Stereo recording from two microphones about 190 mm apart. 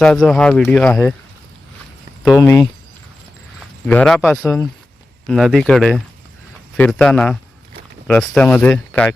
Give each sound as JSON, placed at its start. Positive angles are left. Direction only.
{"t": 0.0, "sound": "speech", "side_deg": 5}
{"t": 2.4, "sound": "speech", "side_deg": 15}
{"t": 3.8, "sound": "speech", "side_deg": 5}
{"t": 5.3, "sound": "speech", "side_deg": 0}